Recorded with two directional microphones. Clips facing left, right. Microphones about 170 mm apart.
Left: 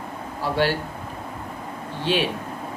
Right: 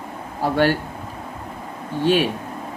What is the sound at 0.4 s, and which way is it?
Speech, 50° right (ahead or behind).